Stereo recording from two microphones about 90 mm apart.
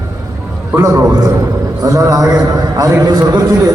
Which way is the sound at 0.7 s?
35° right (ahead or behind).